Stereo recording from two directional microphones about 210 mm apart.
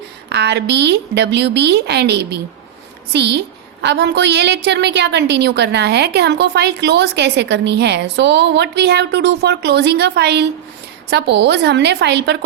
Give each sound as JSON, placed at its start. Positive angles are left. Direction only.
{"t": 0.3, "sound": "a woman's voice", "side_deg": -55}